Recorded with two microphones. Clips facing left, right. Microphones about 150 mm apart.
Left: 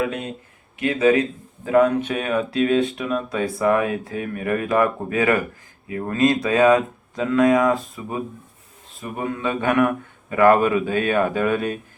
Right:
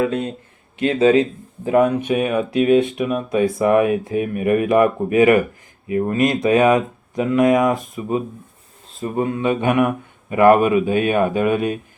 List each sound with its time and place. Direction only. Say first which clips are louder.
0.0 s speech: right 5 dB; 30° right (ahead or behind); by 11.8 s 15° right (ahead or behind)